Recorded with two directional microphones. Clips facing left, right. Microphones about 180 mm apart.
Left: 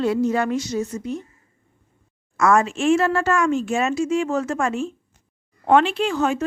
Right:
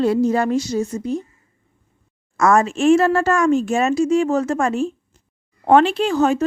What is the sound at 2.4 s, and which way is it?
Speech, 40° right (ahead or behind).